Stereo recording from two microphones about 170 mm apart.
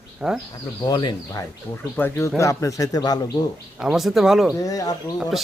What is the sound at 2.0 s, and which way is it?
Speech, 15° left (ahead or behind).